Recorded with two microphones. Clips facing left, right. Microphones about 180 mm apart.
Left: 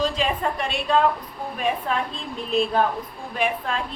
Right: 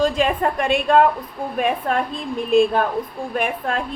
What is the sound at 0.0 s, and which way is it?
A woman's voice, 50° right (ahead or behind).